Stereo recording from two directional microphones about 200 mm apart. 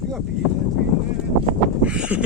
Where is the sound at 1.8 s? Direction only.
5° right (ahead or behind).